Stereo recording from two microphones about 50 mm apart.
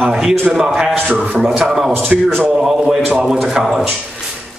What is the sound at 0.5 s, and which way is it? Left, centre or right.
A man's voice, centre.